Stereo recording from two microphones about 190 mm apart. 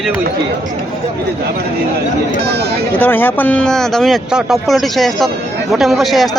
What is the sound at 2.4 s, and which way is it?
Speech, 60° right (ahead or behind).